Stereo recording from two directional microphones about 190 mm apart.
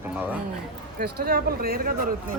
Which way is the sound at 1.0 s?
55° right (ahead or behind).